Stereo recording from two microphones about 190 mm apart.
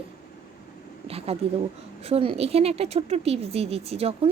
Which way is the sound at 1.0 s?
30° right (ahead or behind).